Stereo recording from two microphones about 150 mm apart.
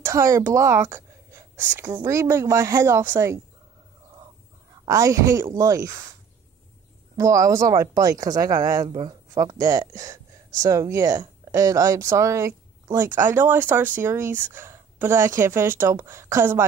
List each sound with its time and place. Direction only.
0.0 s speech: 20° right (ahead or behind)
4.8 s speech: 20° right (ahead or behind)
7.2 s speech: 20° right (ahead or behind)